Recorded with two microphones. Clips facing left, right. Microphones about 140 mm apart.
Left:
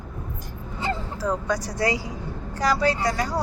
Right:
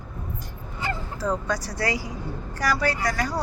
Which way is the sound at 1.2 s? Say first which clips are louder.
Even; 15° left (ahead or behind).